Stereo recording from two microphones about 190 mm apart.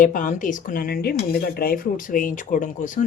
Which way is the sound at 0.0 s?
45° left (ahead or behind).